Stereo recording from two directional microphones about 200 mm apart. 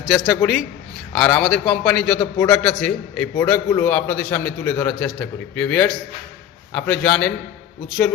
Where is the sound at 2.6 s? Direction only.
5° left (ahead or behind).